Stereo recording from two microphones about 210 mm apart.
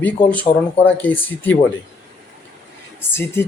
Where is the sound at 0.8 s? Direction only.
10° left (ahead or behind).